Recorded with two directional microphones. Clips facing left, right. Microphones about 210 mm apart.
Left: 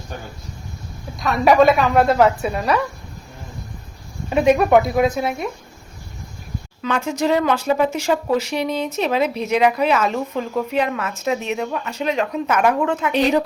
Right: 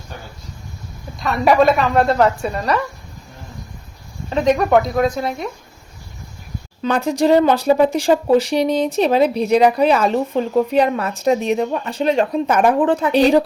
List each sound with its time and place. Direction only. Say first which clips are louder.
1.2 s a woman's voice: even; centre (ahead or behind)
4.3 s speech: left 1 dB; 10° left (ahead or behind)
6.8 s speech: right 4 dB; 35° right (ahead or behind)